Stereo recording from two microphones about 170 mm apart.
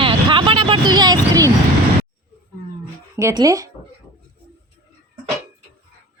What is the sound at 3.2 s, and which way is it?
Speech, 20° right (ahead or behind).